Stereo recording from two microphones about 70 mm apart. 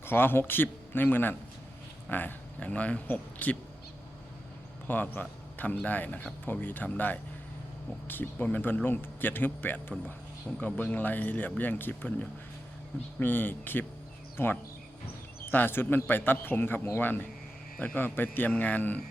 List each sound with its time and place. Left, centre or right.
0.0 s speech: left
4.9 s a man's voice: left